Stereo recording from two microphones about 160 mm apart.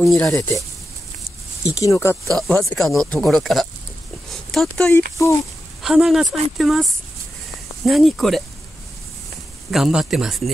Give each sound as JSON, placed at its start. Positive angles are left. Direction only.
{"t": 0.0, "sound": "speech", "side_deg": 20}
{"t": 1.6, "sound": "speech", "side_deg": 20}
{"t": 2.3, "sound": "speech", "side_deg": 0}
{"t": 9.7, "sound": "speech", "side_deg": 0}